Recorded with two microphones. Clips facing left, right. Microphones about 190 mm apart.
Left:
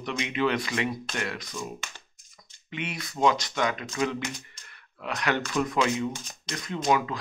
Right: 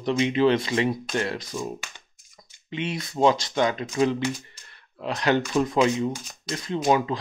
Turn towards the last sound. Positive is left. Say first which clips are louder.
# right 4 dB
turn(degrees=-30)  # may be behind; listen again after turning